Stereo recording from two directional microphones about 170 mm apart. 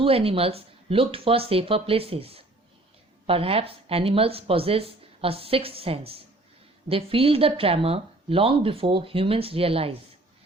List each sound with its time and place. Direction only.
0.0 s speech: 35° right (ahead or behind)